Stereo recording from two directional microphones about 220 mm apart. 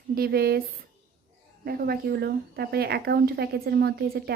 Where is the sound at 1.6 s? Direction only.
45° right (ahead or behind).